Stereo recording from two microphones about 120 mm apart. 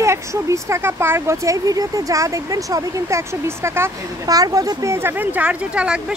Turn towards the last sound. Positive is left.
turn(degrees=-10)  # may be behind; listen again after turning